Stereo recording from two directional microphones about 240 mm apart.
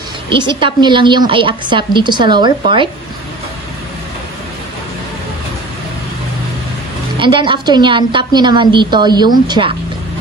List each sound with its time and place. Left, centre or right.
0.4 s a woman's voice: centre
7.2 s a woman's voice: right